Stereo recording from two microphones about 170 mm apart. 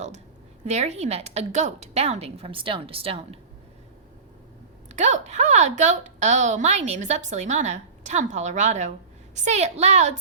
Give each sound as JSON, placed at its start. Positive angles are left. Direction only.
{"t": 0.6, "sound": "a woman's voice", "side_deg": -40}
{"t": 4.9, "sound": "a woman's voice", "side_deg": -45}